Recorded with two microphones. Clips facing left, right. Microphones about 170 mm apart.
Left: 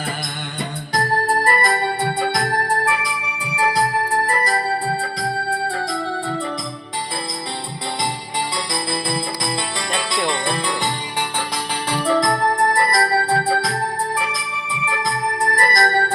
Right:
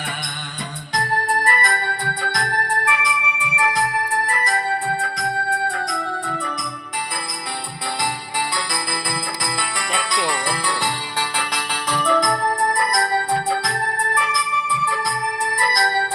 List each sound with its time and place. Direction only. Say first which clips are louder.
0.9 s organ: left 2 dB; 40° left (ahead or behind)
2.6 s organ: left 2 dB; 35° left (ahead or behind)
8.4 s music: left 1 dB; 20° left (ahead or behind)
11.9 s music: left 1 dB; 30° left (ahead or behind)
12.7 s organ: left 2 dB; 30° left (ahead or behind)
15.4 s organ: left 4 dB; 40° left (ahead or behind)